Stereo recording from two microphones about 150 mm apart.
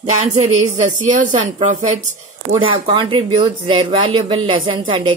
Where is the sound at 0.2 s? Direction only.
50° right (ahead or behind).